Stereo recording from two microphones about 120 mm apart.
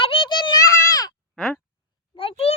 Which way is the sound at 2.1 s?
50° left (ahead or behind).